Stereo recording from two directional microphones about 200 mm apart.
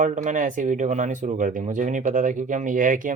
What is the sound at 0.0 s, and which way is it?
Speech, 40° right (ahead or behind).